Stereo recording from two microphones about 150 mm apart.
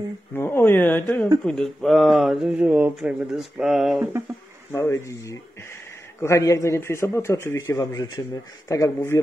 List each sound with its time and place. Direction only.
0.3 s speech: 15° left (ahead or behind); by 4.1 s centre (ahead or behind)
4.7 s a man's voice: 20° left (ahead or behind)